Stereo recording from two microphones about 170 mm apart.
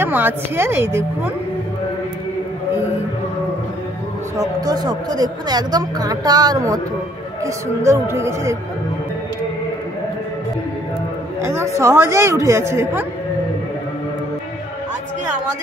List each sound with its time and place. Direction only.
0.0 s speech: 10° right (ahead or behind)
4.4 s a woman's voice: 20° right (ahead or behind)
11.4 s speech: 15° right (ahead or behind)